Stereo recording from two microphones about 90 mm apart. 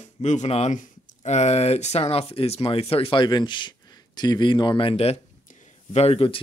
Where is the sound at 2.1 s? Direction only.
90° left.